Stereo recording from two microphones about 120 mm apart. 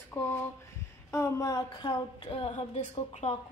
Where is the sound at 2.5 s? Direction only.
70° left (ahead or behind).